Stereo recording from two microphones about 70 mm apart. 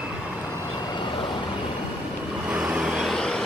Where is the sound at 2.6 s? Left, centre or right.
Centre.